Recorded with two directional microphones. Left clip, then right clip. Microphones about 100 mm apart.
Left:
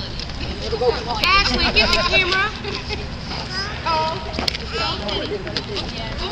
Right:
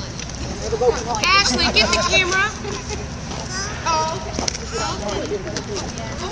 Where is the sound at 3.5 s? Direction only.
10° right (ahead or behind).